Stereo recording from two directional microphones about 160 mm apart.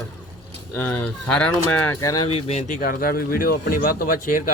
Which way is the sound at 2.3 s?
45° left (ahead or behind).